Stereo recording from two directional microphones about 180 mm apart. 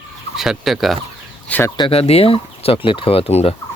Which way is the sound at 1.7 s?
30° left (ahead or behind).